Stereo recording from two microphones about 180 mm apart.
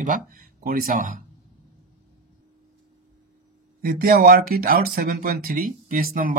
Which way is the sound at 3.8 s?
60° right (ahead or behind).